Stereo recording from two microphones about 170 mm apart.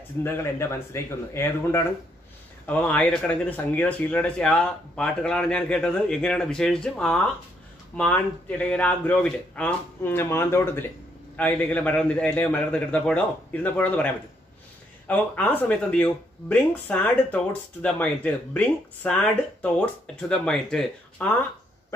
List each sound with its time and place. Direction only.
0.2 s speech: 15° left (ahead or behind)